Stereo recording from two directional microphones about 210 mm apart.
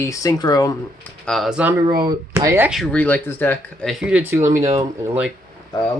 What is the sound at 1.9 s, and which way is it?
Speech, 20° right (ahead or behind).